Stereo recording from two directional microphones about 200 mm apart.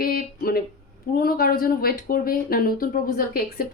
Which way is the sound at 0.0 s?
50° left (ahead or behind).